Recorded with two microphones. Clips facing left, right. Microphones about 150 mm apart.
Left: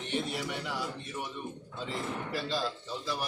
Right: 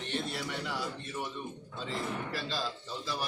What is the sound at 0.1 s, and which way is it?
Speech, 10° left (ahead or behind).